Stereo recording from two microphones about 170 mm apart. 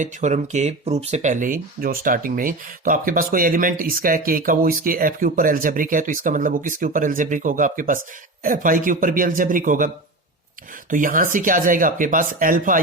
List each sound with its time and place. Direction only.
0.0 s speech: 45° right (ahead or behind)